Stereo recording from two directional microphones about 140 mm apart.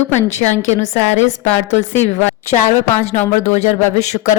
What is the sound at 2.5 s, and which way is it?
Speech, 55° left (ahead or behind).